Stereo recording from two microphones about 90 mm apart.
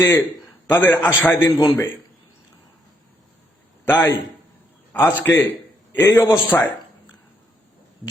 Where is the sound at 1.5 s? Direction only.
40° left (ahead or behind).